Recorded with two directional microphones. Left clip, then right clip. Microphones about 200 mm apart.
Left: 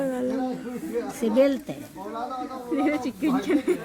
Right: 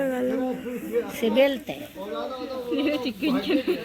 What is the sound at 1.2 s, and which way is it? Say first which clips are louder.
Speech: even; 70° left (ahead or behind).